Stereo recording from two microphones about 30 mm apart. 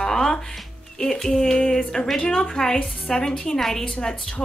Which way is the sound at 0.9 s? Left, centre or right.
Centre.